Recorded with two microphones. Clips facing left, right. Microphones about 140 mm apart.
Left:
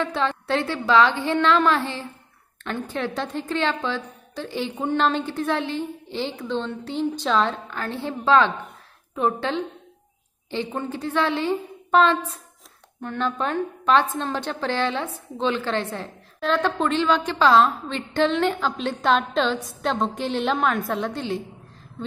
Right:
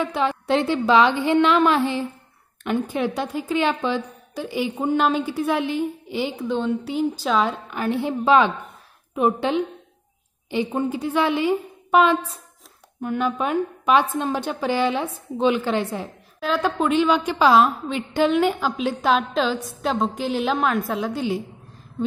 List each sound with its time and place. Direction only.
0.0 s a woman's voice: 10° right (ahead or behind)